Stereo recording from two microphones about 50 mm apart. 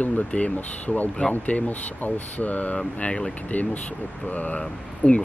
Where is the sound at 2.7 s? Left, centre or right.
Centre.